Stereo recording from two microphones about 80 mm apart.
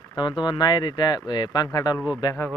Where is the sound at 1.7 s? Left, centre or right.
Left.